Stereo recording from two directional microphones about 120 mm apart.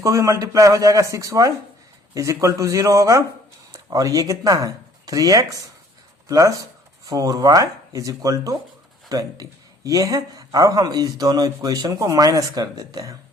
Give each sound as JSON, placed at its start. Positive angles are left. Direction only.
{"t": 0.0, "sound": "a man's voice", "side_deg": -25}